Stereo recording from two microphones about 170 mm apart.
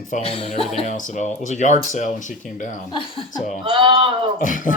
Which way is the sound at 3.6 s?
25° right (ahead or behind).